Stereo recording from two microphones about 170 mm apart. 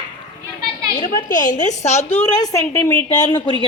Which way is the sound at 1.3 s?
50° left (ahead or behind).